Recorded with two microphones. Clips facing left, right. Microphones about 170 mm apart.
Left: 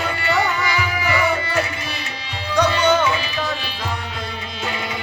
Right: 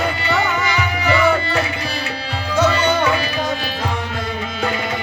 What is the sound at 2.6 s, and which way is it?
Music, 10° right (ahead or behind).